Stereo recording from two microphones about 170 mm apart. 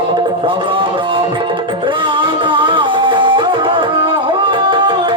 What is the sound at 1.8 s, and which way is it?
Music, 30° right (ahead or behind).